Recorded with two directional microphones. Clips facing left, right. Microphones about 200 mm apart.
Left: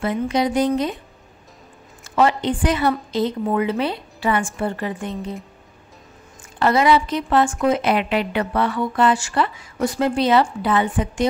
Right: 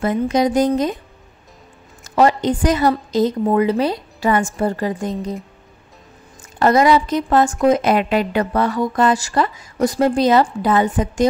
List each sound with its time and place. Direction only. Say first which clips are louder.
0.0 s speech: right 3 dB; 45° right (ahead or behind)
2.0 s a woman's voice: right 3 dB; 40° right (ahead or behind)
6.6 s a woman's voice: right 3 dB; 40° right (ahead or behind)